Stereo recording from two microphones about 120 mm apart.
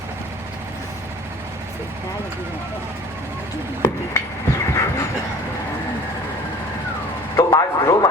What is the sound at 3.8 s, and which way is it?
Speech, 25° left (ahead or behind).